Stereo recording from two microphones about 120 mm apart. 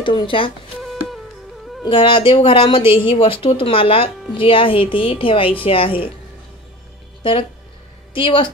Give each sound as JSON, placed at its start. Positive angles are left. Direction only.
{"t": 0.0, "sound": "speech", "side_deg": 40}
{"t": 0.8, "sound": "music", "side_deg": 0}
{"t": 1.9, "sound": "speech", "side_deg": 45}
{"t": 8.1, "sound": "a woman's voice", "side_deg": 45}